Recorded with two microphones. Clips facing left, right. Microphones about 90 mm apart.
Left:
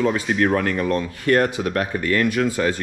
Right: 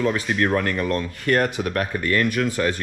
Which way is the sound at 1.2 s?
40° left (ahead or behind).